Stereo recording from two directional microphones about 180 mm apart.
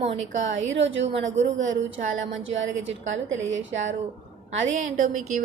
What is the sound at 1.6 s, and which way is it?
A woman's voice, 90° right.